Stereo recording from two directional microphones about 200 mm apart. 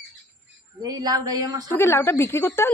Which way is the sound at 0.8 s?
20° right (ahead or behind).